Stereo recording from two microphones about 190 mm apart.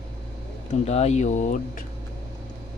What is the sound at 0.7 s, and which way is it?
Speech, 35° left (ahead or behind).